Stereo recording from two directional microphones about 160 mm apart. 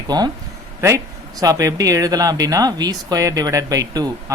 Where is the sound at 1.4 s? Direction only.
20° right (ahead or behind).